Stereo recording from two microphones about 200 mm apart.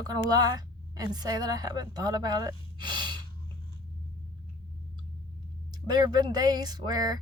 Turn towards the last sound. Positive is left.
turn(degrees=-20)  # may be behind; listen again after turning